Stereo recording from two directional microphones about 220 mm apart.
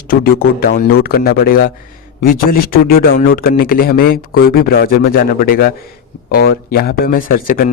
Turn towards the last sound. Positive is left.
turn(degrees=40)  # may be behind; listen again after turning